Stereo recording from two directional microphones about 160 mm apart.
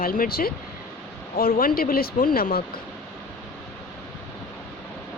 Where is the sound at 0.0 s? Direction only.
65° left (ahead or behind).